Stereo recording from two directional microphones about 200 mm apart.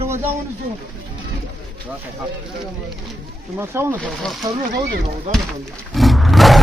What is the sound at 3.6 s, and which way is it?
Speech, 10° right (ahead or behind).